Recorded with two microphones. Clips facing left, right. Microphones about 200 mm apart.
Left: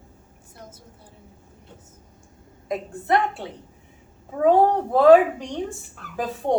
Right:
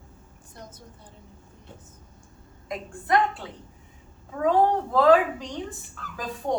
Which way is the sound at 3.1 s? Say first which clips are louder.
Left 1 dB; 25° left (ahead or behind).